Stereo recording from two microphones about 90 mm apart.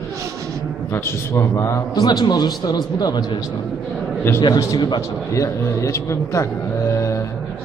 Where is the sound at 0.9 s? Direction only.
30° left (ahead or behind).